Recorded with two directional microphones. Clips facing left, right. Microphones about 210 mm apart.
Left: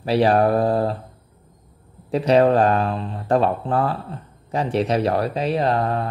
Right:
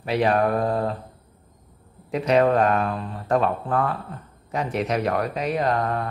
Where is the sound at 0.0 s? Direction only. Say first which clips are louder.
Left 4 dB; 35° left (ahead or behind).